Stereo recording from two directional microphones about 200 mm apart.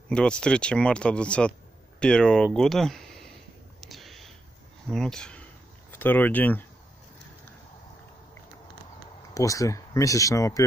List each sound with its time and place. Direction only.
0.1 s speech: 5° left (ahead or behind)
3.8 s a sound: centre (ahead or behind)
4.8 s speech: 5° left (ahead or behind)
9.3 s speech: 15° left (ahead or behind)